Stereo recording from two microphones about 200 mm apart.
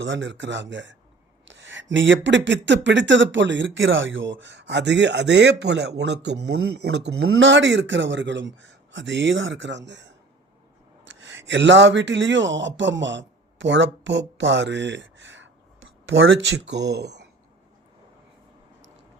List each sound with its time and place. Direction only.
0.0 s speech: 65° right (ahead or behind)